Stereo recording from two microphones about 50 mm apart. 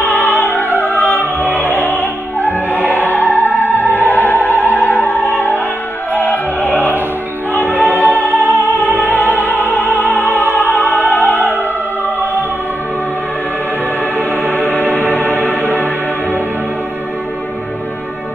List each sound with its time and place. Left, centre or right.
0.0 s opera: left
1.6 s music: left
8.1 s music: right
8.8 s music: left
9.7 s opera: left
14.1 s music: right
14.5 s music: left